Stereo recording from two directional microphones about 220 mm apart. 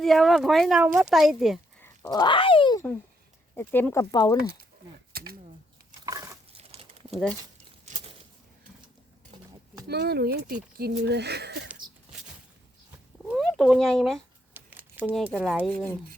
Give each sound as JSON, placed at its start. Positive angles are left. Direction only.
{"t": 0.0, "sound": "speech", "side_deg": 0}
{"t": 1.8, "sound": "speech", "side_deg": 15}
{"t": 3.5, "sound": "speech", "side_deg": 10}
{"t": 5.1, "sound": "speech", "side_deg": -45}
{"t": 6.1, "sound": "a sound", "side_deg": -15}
{"t": 6.5, "sound": "a sound", "side_deg": -25}
{"t": 7.1, "sound": "speech", "side_deg": 0}
{"t": 9.8, "sound": "speech", "side_deg": -45}
{"t": 13.2, "sound": "speech", "side_deg": 0}